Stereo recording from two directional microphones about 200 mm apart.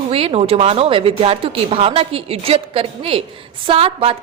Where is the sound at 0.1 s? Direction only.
30° right (ahead or behind).